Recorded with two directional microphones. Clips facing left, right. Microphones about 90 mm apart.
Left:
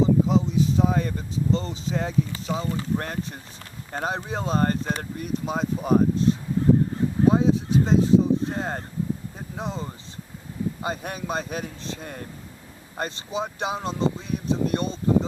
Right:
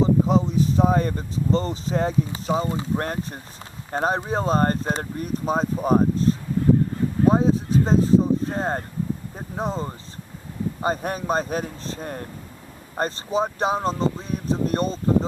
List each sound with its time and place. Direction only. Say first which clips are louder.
0.0 s speech: right 1 dB; 45° right (ahead or behind)
2.5 s speech: right 5 dB; 30° right (ahead or behind)
2.9 s speech: right 2 dB; 40° right (ahead or behind)